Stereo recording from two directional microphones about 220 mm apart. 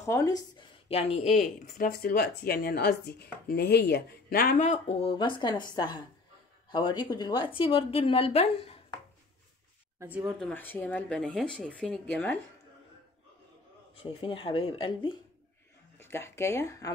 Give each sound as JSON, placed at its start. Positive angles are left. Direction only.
{"t": 0.0, "sound": "speech", "side_deg": 15}
{"t": 9.9, "sound": "speech", "side_deg": -5}
{"t": 10.5, "sound": "speech", "side_deg": 10}
{"t": 13.9, "sound": "speech", "side_deg": 25}
{"t": 16.0, "sound": "speech", "side_deg": 10}